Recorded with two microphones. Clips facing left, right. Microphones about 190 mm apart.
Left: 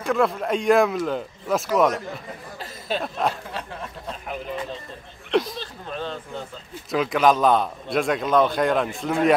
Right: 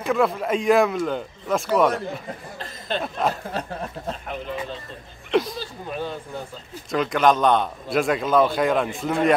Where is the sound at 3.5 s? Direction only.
40° right (ahead or behind).